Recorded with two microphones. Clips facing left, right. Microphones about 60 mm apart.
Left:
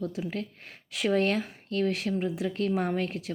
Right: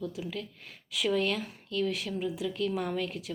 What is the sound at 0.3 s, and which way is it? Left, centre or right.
Speech, left.